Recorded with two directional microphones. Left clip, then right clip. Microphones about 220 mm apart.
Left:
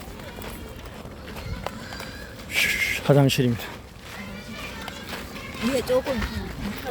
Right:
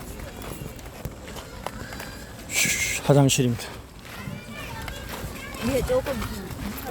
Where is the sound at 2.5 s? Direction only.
Centre (ahead or behind).